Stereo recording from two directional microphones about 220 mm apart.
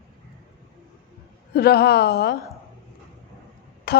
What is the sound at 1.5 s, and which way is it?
Speech, 45° left (ahead or behind).